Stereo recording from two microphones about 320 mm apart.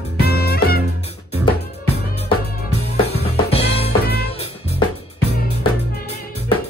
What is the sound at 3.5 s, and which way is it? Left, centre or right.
Music, centre.